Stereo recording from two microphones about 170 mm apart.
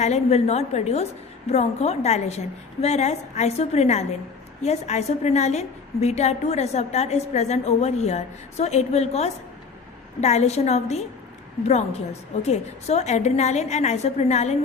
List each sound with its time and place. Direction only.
0.0 s a woman's voice: 40° left (ahead or behind)